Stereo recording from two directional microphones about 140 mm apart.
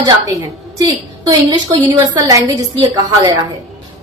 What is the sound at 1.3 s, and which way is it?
A woman's voice, 30° right (ahead or behind).